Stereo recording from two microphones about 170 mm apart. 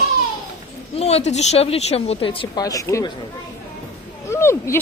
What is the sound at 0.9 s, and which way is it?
Speech, 40° left (ahead or behind).